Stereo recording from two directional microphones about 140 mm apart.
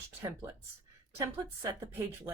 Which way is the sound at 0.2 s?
20° right (ahead or behind).